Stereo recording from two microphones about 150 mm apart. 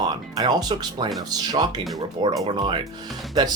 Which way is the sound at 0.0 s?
30° right (ahead or behind).